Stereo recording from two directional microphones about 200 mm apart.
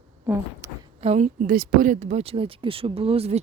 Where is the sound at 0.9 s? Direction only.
35° right (ahead or behind).